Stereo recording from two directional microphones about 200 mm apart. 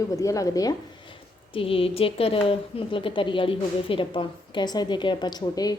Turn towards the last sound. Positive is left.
turn(degrees=20)  # may be behind; listen again after turning